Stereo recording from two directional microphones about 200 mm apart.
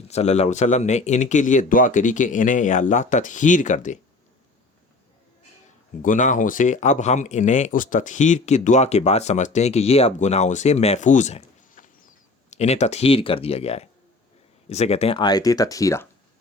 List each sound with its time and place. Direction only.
0.1 s speech: 30° left (ahead or behind)
6.0 s speech: 40° left (ahead or behind); by 16.0 s 15° left (ahead or behind)